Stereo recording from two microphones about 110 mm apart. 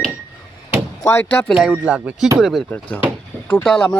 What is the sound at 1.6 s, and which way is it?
Speech, centre (ahead or behind).